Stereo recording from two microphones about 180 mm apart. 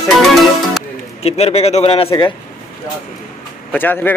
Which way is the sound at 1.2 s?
35° left (ahead or behind).